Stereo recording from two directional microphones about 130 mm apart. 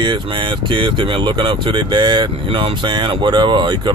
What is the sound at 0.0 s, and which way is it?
Speech, 35° right (ahead or behind).